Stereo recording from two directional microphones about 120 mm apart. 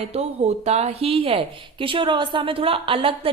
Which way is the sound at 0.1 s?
65° right (ahead or behind).